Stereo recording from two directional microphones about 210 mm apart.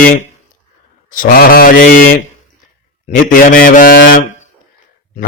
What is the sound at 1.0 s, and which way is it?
Mantra, 40° left (ahead or behind).